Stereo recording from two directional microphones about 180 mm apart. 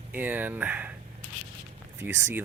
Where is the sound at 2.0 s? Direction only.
10° right (ahead or behind).